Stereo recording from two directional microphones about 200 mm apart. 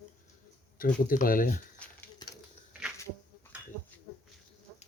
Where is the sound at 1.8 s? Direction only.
5° left (ahead or behind).